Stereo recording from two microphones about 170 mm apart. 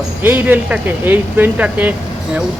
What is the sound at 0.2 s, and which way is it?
Speech, 10° right (ahead or behind).